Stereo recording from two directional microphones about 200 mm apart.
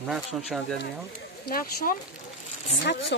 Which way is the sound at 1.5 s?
45° left (ahead or behind).